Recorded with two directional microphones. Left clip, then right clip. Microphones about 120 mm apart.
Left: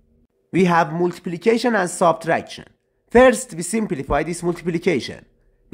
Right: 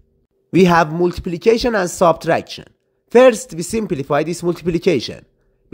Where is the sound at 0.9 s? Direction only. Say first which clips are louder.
Right 4 dB; 25° right (ahead or behind).